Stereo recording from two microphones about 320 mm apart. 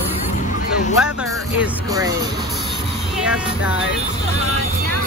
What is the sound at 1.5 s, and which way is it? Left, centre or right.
Speech, centre.